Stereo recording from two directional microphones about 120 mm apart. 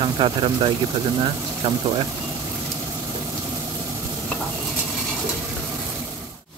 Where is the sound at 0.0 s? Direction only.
45° right (ahead or behind).